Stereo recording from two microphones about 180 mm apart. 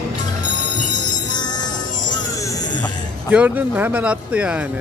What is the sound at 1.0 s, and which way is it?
Music, 25° left (ahead or behind).